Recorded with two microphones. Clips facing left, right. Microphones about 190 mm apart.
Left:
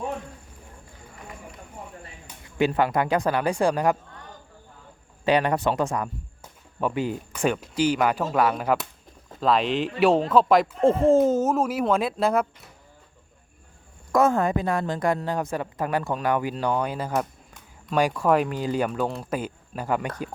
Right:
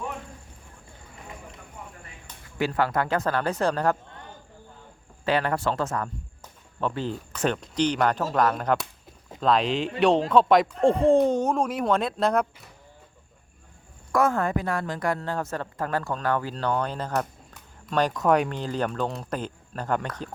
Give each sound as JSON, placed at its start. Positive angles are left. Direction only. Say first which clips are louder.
{"t": 1.8, "sound": "a sound", "louder": "left 2 dB", "side_deg": 30}
{"t": 2.2, "sound": "speech", "louder": "left 5 dB", "side_deg": 20}
{"t": 5.2, "sound": "speech", "louder": "left 3 dB", "side_deg": 15}
{"t": 14.1, "sound": "speech", "louder": "left 3 dB", "side_deg": 20}